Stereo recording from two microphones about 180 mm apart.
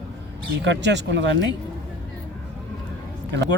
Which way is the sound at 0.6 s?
75° right (ahead or behind).